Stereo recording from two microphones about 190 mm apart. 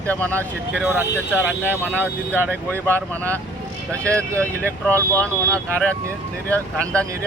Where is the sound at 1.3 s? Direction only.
10° left (ahead or behind).